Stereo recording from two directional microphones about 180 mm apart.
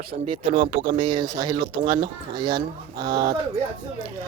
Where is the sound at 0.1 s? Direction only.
45° right (ahead or behind).